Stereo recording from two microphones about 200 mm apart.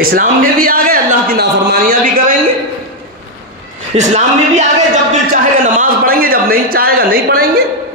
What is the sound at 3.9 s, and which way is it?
A man's voice, 35° right (ahead or behind).